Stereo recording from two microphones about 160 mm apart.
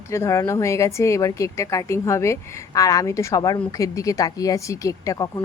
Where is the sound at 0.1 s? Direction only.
20° left (ahead or behind).